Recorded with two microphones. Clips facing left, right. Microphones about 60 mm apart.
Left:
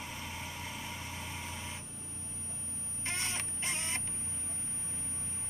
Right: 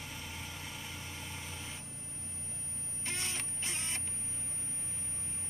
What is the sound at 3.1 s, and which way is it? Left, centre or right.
Music, left.